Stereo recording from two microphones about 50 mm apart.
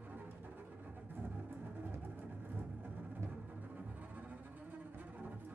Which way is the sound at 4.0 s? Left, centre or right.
Right.